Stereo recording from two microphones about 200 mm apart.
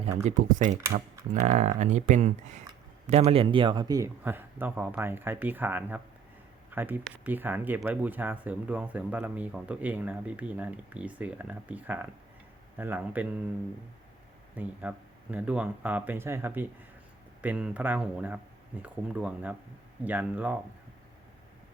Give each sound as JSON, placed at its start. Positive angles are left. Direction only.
{"t": 0.3, "sound": "speech", "side_deg": -40}
{"t": 14.5, "sound": "speech", "side_deg": -5}